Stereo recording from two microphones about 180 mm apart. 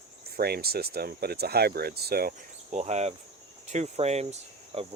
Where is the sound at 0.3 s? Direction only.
60° right (ahead or behind).